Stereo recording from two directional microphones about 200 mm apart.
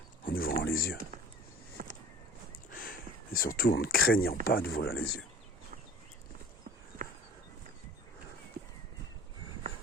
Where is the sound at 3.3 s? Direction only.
45° left (ahead or behind).